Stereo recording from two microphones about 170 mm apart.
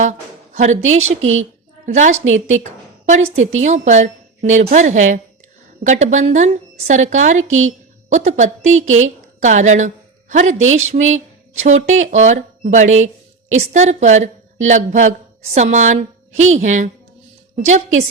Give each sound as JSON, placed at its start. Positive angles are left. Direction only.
{"t": 0.0, "sound": "a woman's voice", "side_deg": -45}